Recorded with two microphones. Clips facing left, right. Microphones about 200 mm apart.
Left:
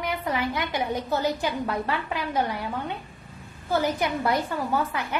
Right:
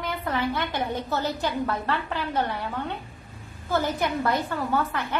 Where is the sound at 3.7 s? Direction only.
10° left (ahead or behind).